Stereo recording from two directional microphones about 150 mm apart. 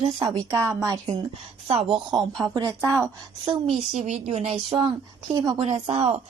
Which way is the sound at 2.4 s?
25° right (ahead or behind).